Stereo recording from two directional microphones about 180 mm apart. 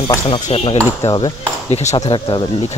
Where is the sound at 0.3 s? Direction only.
30° left (ahead or behind).